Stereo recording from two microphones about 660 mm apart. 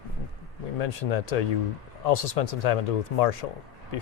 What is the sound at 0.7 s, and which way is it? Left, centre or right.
Speech, left.